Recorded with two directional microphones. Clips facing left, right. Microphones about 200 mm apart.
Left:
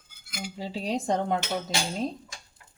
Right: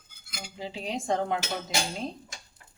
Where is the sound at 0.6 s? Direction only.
40° left (ahead or behind).